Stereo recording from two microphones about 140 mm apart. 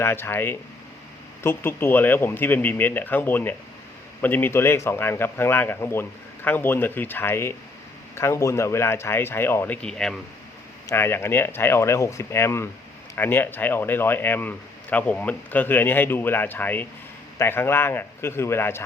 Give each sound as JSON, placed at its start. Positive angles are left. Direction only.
{"t": 0.0, "sound": "speech", "side_deg": 15}
{"t": 9.8, "sound": "speech", "side_deg": 5}
{"t": 10.8, "sound": "speech", "side_deg": 15}